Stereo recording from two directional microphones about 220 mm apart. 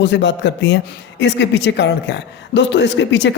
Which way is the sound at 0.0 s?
55° left (ahead or behind).